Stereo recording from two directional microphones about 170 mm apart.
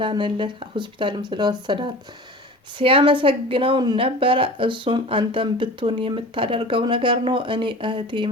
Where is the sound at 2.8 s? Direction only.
30° right (ahead or behind).